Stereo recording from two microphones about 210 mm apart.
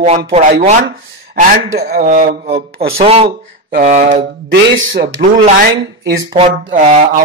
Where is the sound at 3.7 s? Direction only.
40° right (ahead or behind).